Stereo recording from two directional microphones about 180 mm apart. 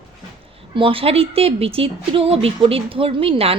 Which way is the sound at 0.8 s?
30° right (ahead or behind).